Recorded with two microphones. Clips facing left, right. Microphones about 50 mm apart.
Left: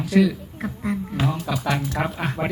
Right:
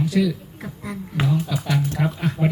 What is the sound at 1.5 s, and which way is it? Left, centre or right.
Speech, left.